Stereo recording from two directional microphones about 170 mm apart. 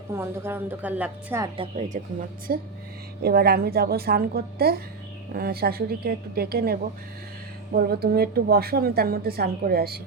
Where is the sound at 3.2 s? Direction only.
65° right (ahead or behind).